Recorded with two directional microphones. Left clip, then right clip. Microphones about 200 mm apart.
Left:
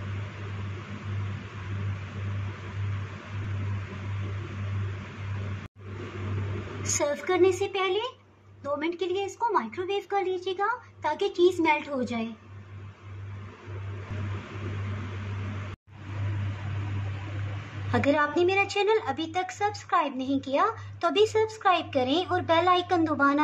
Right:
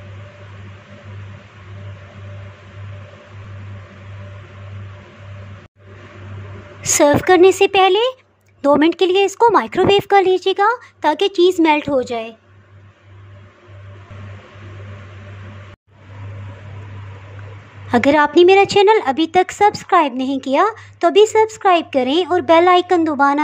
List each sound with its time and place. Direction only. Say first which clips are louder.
6.8 s speech: right 15 dB; 50° right (ahead or behind)
17.9 s a woman's voice: right 12 dB; 35° right (ahead or behind)